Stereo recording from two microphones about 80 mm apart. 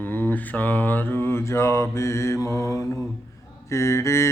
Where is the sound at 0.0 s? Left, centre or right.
Left.